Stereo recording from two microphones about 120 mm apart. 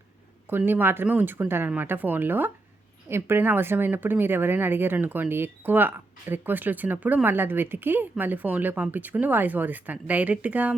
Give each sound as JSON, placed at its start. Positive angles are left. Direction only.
{"t": 0.5, "sound": "speech", "side_deg": -15}